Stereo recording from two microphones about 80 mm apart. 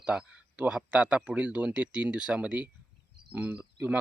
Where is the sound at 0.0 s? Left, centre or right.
Centre.